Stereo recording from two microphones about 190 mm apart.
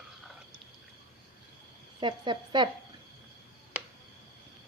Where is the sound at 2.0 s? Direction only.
25° right (ahead or behind).